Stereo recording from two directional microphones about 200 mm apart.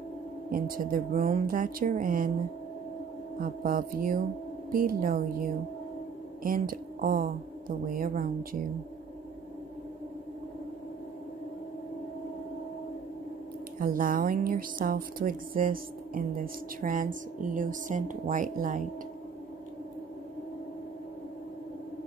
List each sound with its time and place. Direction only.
0.5 s a woman's voice: 45° right (ahead or behind)
3.3 s a woman's voice: 45° right (ahead or behind)
13.7 s a woman's voice: 45° right (ahead or behind)